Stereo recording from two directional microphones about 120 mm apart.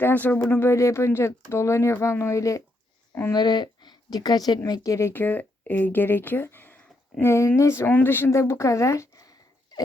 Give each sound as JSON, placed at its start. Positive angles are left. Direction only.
{"t": 0.0, "sound": "speech", "side_deg": 15}
{"t": 3.3, "sound": "speech", "side_deg": 35}